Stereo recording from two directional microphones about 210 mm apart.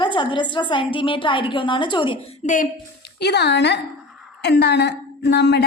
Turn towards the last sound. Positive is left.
turn(degrees=55)  # may be behind; listen again after turning